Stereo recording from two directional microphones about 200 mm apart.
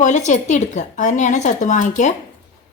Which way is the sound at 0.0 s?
35° left (ahead or behind).